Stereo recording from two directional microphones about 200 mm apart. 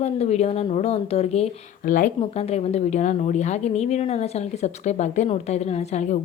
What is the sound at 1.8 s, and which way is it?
Speech, 45° left (ahead or behind).